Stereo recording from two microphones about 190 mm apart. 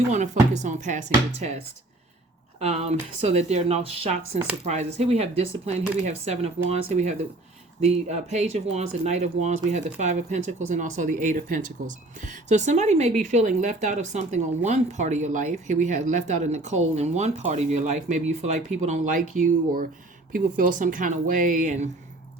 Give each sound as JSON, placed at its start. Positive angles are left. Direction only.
{"t": 0.1, "sound": "speech", "side_deg": -40}